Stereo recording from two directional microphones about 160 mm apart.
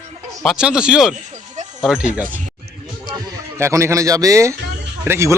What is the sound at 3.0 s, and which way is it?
Speech, 20° right (ahead or behind).